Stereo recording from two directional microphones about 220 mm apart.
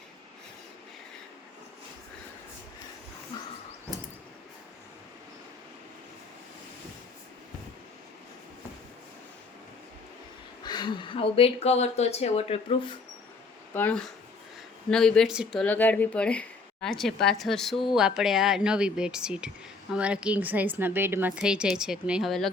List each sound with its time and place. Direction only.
10.6 s speech: 20° left (ahead or behind)
13.7 s a woman's voice: 10° left (ahead or behind)